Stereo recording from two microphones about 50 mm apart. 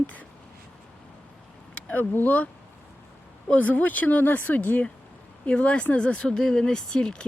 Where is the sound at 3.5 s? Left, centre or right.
Left.